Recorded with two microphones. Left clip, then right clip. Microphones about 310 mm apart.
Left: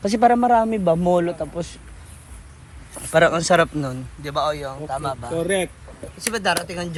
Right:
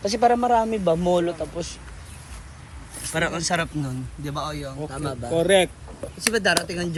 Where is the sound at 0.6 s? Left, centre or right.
Left.